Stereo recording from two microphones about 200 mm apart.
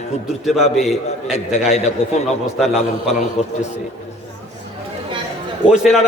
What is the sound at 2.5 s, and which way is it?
Speech, centre (ahead or behind).